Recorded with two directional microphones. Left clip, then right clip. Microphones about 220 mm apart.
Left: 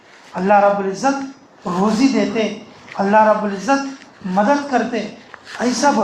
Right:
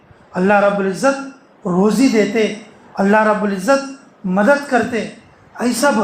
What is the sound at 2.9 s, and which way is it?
Speech, 55° right (ahead or behind).